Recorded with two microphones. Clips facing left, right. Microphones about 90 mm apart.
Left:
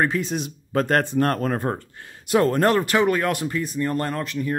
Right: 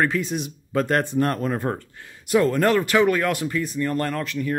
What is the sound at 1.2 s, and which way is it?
Speech, 50° left (ahead or behind).